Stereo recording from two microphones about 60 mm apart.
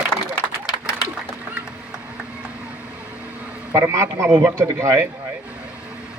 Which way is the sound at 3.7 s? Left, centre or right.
Right.